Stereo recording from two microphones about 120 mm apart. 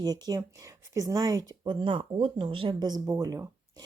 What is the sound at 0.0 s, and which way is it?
Speech, 30° right (ahead or behind).